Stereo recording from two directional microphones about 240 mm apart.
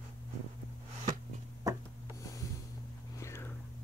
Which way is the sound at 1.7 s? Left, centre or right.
Centre.